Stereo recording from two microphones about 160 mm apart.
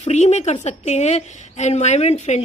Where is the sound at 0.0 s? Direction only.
45° left (ahead or behind).